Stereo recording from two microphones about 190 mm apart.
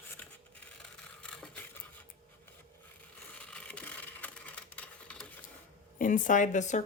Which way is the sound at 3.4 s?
5° left (ahead or behind).